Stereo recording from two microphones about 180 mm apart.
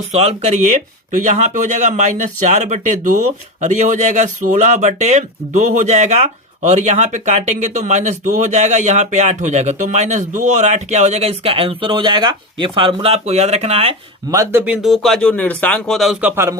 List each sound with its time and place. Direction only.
0.1 s speech: 35° right (ahead or behind)
14.3 s speech: 20° right (ahead or behind)
14.6 s speech: 5° right (ahead or behind)
16.3 s speech: 15° right (ahead or behind)